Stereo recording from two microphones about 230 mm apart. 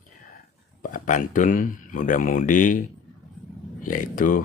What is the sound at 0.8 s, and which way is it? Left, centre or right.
Speech, left.